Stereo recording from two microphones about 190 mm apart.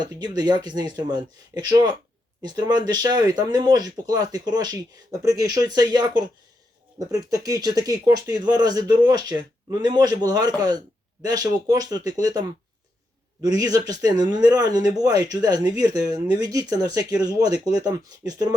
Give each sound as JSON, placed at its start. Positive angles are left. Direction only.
{"t": 0.0, "sound": "speech", "side_deg": -20}
{"t": 7.1, "sound": "speech", "side_deg": -20}